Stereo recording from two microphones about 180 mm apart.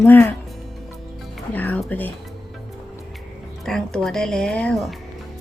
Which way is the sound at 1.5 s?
10° left (ahead or behind).